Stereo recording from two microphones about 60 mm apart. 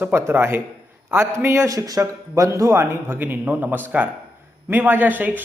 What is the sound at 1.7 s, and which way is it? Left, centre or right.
Speech, right.